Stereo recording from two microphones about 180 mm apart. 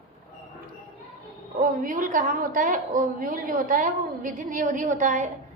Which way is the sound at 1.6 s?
50° right (ahead or behind).